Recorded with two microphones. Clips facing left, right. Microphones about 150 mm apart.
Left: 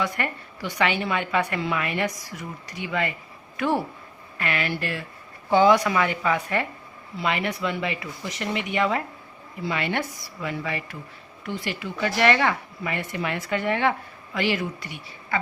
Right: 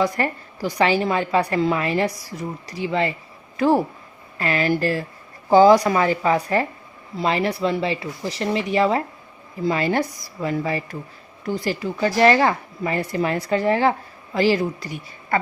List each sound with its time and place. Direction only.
0.0 s a woman's voice: 35° right (ahead or behind)